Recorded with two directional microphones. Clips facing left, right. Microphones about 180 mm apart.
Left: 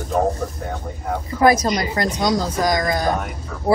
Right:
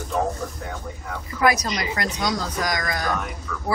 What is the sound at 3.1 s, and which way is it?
Speech, 40° left (ahead or behind).